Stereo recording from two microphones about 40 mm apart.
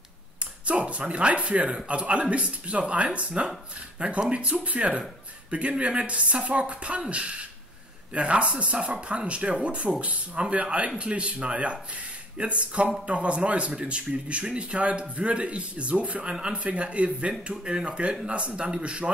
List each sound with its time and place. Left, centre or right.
0.4 s speech: right